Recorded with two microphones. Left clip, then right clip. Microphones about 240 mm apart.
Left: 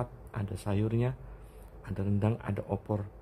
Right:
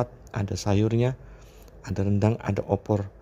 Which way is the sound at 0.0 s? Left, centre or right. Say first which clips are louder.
Right 9 dB; right.